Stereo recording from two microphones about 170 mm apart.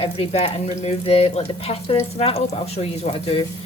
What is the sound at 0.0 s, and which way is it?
Speech, 35° left (ahead or behind).